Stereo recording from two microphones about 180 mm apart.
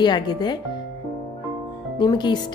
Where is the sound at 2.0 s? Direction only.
25° left (ahead or behind).